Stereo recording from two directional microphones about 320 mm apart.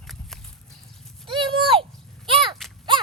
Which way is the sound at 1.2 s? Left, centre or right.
Centre.